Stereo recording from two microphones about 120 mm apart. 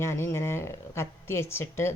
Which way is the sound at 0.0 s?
20° left (ahead or behind).